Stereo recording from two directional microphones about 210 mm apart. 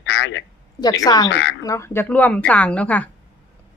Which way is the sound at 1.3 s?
60° left (ahead or behind).